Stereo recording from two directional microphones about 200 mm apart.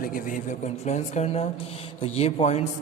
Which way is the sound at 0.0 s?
45° left (ahead or behind).